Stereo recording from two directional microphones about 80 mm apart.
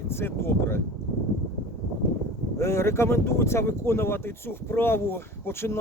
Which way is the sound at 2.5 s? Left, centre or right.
Left.